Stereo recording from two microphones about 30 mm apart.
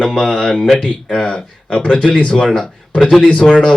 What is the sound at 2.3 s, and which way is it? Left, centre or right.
Speech, left.